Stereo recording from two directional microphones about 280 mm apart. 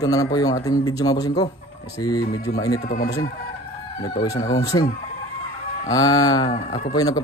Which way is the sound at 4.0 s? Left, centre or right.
Centre.